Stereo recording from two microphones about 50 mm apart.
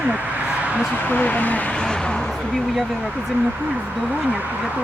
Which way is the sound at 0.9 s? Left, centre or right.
Left.